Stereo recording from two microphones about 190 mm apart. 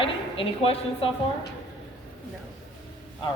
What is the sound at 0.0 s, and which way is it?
Speech, 30° left (ahead or behind).